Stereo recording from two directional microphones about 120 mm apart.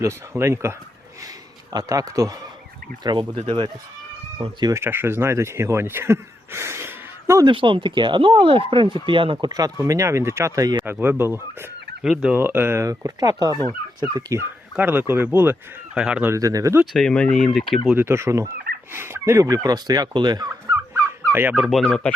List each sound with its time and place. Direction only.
0.0 s speech: 20° right (ahead or behind)
4.4 s speech: 45° right (ahead or behind)
4.7 s speech: 20° right (ahead or behind)
7.4 s speech: 45° right (ahead or behind)
11.0 s speech: 20° right (ahead or behind)
12.0 s speech: 5° right (ahead or behind)
12.4 s speech: 15° right (ahead or behind)
14.8 s speech: 15° right (ahead or behind)
16.3 s speech: 30° right (ahead or behind)
16.9 s speech: 5° left (ahead or behind)
17.9 s speech: 20° right (ahead or behind); by 20.5 s 35° right (ahead or behind)
20.9 s fowl: 20° right (ahead or behind)
21.5 s speech: centre (ahead or behind)